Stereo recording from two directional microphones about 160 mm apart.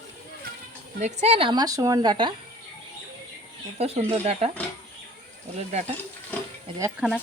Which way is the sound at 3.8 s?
40° right (ahead or behind).